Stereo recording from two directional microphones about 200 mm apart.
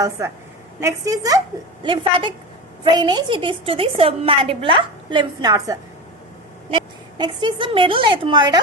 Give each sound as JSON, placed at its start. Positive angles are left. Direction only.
{"t": 0.8, "sound": "a woman's voice", "side_deg": -15}